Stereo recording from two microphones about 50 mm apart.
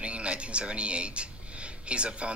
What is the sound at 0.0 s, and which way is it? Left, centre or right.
Speech, right.